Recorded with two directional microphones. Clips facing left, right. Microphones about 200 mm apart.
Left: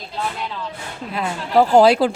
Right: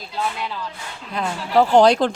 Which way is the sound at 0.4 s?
Centre (ahead or behind).